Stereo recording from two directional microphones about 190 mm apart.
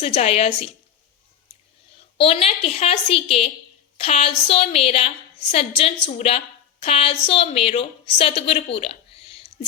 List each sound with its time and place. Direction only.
0.0 s a woman's voice: 30° left (ahead or behind)
2.1 s a woman's voice: 30° left (ahead or behind)
8.7 s a sound: 30° left (ahead or behind)